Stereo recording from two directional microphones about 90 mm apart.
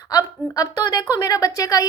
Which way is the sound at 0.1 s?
40° left (ahead or behind).